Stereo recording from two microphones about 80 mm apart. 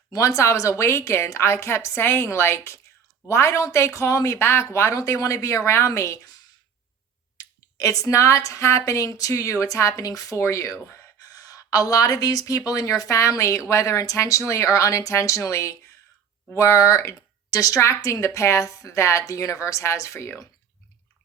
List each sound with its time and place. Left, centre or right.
0.1 s speech: left
7.3 s speech: left
11.3 s speech: left